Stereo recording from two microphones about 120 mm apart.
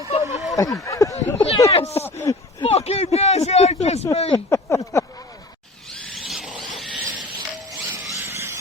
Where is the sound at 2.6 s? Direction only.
55° left (ahead or behind).